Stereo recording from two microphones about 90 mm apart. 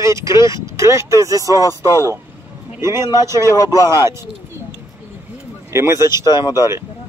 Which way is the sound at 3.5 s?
35° left (ahead or behind).